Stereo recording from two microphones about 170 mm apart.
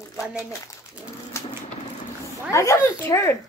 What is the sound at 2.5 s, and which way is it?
Speech, 15° left (ahead or behind).